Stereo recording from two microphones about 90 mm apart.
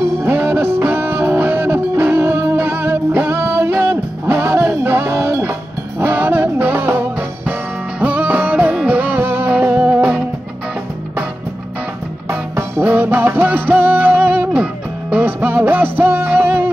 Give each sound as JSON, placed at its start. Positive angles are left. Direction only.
{"t": 0.2, "sound": "music", "side_deg": -25}
{"t": 12.3, "sound": "music", "side_deg": -25}